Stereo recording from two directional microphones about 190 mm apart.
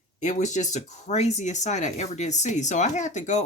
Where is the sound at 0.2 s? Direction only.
40° left (ahead or behind).